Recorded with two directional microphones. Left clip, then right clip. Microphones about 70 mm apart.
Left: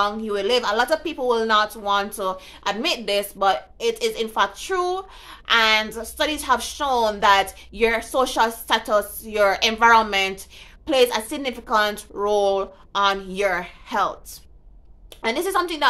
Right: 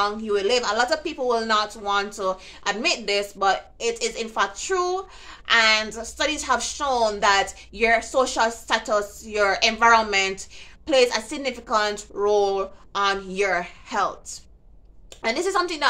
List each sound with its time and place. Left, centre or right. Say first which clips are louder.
0.0 s speech: even; left